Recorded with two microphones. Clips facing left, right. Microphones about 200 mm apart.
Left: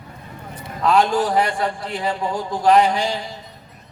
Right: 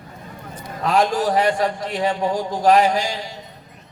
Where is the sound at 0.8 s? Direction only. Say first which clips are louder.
Left 1 dB; 40° right (ahead or behind).